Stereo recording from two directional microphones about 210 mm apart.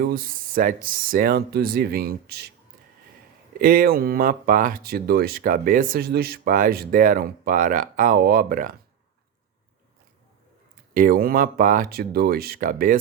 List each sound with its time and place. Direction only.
0.0 s speech: 45° right (ahead or behind)
3.6 s speech: 45° right (ahead or behind)
10.9 s speech: 45° right (ahead or behind)